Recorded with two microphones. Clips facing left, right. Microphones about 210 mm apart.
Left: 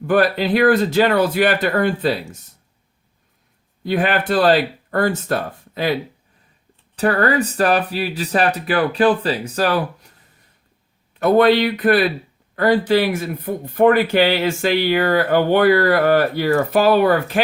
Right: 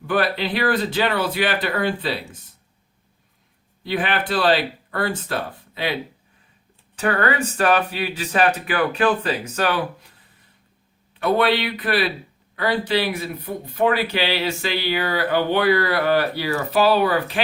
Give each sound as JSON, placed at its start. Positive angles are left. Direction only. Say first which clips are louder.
{"t": 0.1, "sound": "speech", "louder": "left 5 dB", "side_deg": 45}
{"t": 3.8, "sound": "speech", "louder": "left 5 dB", "side_deg": 45}
{"t": 6.9, "sound": "speech", "louder": "left 4 dB", "side_deg": 35}
{"t": 11.2, "sound": "speech", "louder": "left 6 dB", "side_deg": 45}